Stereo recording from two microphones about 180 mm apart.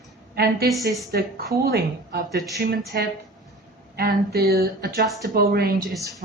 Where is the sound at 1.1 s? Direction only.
55° right (ahead or behind).